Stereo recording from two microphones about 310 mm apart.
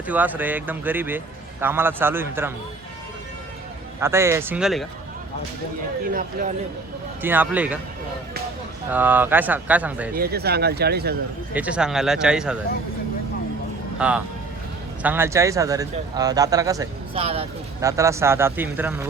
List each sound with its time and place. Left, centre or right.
0.1 s speech: centre
4.0 s speech: centre
6.1 s speech: right
7.2 s speech: centre
8.9 s speech: centre
10.2 s speech: right
11.5 s speech: centre
14.0 s speech: centre